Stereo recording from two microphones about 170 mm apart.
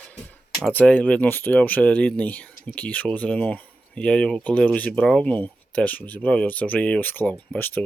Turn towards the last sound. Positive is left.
turn(degrees=10)  # may be behind; listen again after turning